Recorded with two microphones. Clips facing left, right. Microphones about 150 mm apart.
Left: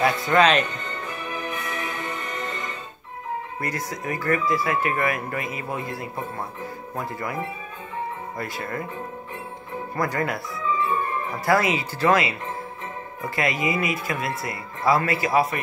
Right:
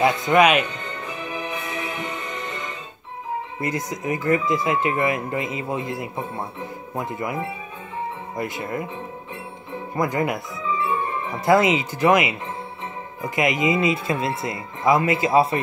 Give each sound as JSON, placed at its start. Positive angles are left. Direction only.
{"t": 0.0, "sound": "speech", "side_deg": -20}
{"t": 1.5, "sound": "music", "side_deg": -25}
{"t": 3.5, "sound": "speech", "side_deg": -20}
{"t": 8.4, "sound": "speech", "side_deg": -20}
{"t": 9.9, "sound": "speech", "side_deg": -20}
{"t": 11.4, "sound": "speech", "side_deg": -20}